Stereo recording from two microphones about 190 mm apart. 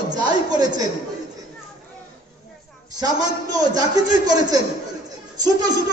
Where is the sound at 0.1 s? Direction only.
20° right (ahead or behind).